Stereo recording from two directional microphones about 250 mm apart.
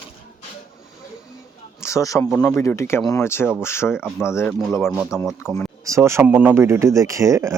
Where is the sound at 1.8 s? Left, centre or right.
Centre.